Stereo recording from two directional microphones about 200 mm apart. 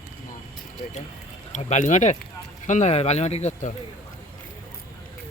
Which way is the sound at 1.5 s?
40° left (ahead or behind).